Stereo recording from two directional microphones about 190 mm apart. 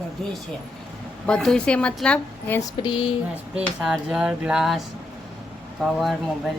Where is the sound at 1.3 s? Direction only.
5° left (ahead or behind).